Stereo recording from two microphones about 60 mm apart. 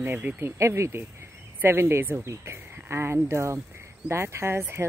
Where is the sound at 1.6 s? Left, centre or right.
Right.